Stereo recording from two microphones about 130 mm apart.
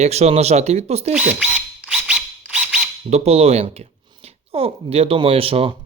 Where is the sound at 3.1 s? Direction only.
55° right (ahead or behind).